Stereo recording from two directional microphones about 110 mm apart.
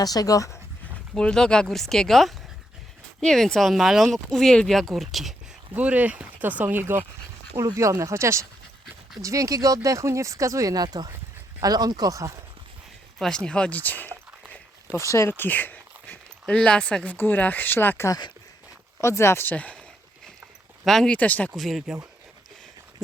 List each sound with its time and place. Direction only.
0.0 s speech: 35° left (ahead or behind)
1.1 s speech: 5° left (ahead or behind)
5.7 s speech: 15° right (ahead or behind)
7.5 s speech: 30° right (ahead or behind)
13.1 s speech: 5° left (ahead or behind)
14.9 s speech: 25° left (ahead or behind)
20.8 s speech: 5° left (ahead or behind)
21.5 s speech: centre (ahead or behind)